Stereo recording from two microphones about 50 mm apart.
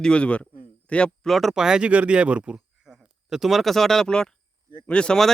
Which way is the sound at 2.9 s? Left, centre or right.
Centre.